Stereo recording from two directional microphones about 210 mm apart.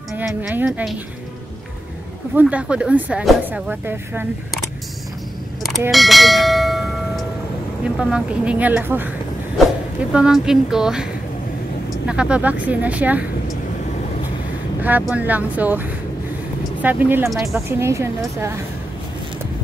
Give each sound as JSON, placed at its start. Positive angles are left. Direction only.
{"t": 0.4, "sound": "speech", "side_deg": -5}
{"t": 2.3, "sound": "speech", "side_deg": -5}
{"t": 5.9, "sound": "speech", "side_deg": 0}
{"t": 10.1, "sound": "speech", "side_deg": -5}
{"t": 14.8, "sound": "speech", "side_deg": -10}
{"t": 17.7, "sound": "speech", "side_deg": -15}